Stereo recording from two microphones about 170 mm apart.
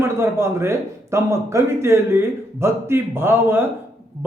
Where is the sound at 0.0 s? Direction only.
15° right (ahead or behind).